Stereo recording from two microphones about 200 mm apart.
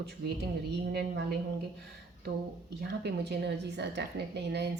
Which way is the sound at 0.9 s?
55° right (ahead or behind).